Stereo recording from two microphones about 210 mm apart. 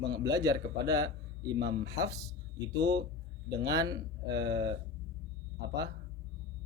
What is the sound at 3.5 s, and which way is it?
Speech, 15° right (ahead or behind).